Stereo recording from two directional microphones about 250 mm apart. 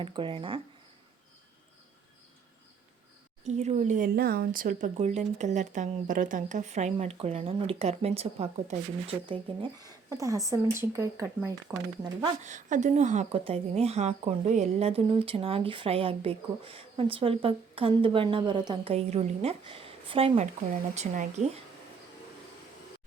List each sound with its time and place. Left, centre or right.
0.0 s a woman's voice: centre
3.4 s a woman's voice: right
12.4 s a woman's voice: right